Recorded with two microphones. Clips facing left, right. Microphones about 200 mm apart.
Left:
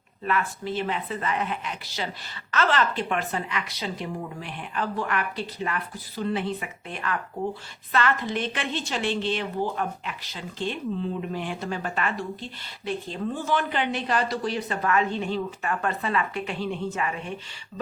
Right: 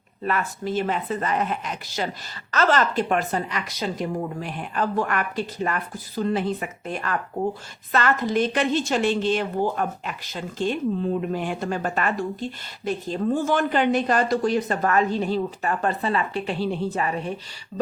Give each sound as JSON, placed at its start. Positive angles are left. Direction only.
{"t": 0.3, "sound": "a woman's voice", "side_deg": -45}